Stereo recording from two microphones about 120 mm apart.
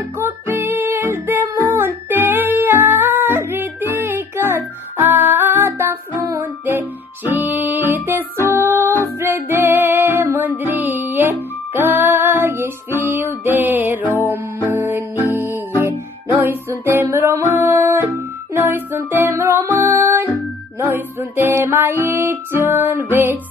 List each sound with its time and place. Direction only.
0.2 s music: 20° right (ahead or behind)